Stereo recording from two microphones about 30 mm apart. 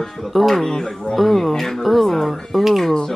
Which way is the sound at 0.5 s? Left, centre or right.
Centre.